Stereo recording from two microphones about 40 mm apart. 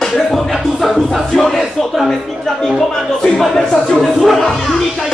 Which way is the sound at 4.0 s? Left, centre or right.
Centre.